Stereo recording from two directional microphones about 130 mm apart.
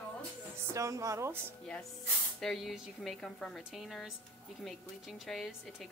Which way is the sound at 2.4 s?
Centre (ahead or behind).